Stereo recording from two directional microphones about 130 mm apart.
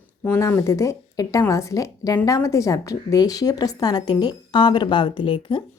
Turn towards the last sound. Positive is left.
turn(degrees=40)  # may be behind; listen again after turning